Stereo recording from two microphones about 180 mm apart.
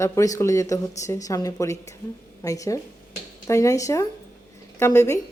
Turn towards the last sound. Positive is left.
turn(degrees=15)  # may be behind; listen again after turning